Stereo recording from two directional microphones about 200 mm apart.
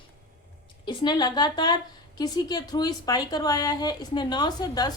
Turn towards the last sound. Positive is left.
turn(degrees=20)  # may be behind; listen again after turning